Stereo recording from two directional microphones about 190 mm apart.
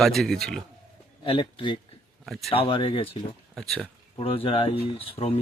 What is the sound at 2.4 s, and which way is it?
Speech, 30° left (ahead or behind).